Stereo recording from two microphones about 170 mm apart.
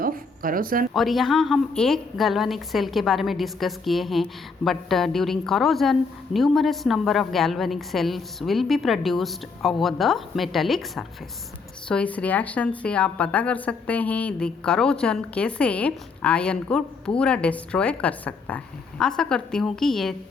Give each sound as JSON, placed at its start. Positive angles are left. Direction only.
{"t": 0.0, "sound": "a woman's voice", "side_deg": -55}
{"t": 0.9, "sound": "a woman's voice", "side_deg": 0}